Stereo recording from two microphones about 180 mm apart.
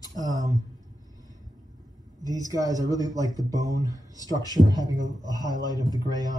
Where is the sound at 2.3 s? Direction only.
20° left (ahead or behind).